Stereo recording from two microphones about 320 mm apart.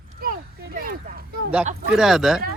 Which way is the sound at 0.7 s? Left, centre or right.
Right.